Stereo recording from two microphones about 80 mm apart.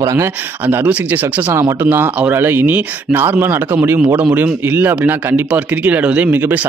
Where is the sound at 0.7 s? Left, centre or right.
Right.